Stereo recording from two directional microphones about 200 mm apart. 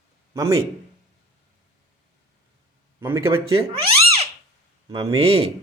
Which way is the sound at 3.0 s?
15° right (ahead or behind).